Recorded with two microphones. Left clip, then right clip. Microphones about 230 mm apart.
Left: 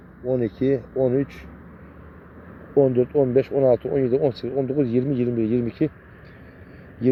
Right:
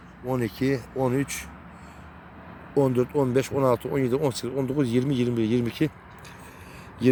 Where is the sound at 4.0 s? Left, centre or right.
Right.